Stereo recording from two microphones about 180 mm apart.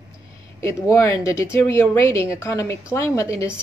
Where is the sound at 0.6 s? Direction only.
15° left (ahead or behind).